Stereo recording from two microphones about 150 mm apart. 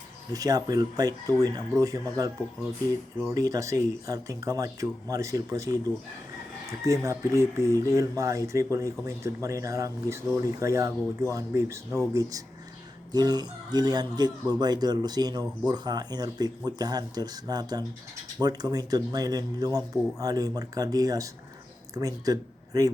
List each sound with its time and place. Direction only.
0.3 s speech: 25° right (ahead or behind)
3.3 s speech: 25° right (ahead or behind)